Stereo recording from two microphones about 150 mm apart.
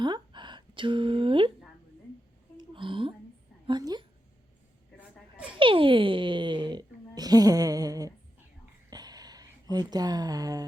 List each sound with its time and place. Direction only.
0.0 s speech: 30° right (ahead or behind)
2.6 s a sound: 35° right (ahead or behind)
3.7 s speech: 30° right (ahead or behind)
5.5 s a child's voice: 35° right (ahead or behind)
7.2 s music: 25° right (ahead or behind)
8.9 s a sound: 25° right (ahead or behind)